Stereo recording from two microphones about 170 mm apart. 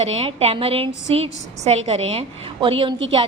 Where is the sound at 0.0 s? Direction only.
35° right (ahead or behind).